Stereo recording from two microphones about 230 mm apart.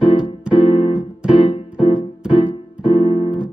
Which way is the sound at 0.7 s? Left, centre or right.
Left.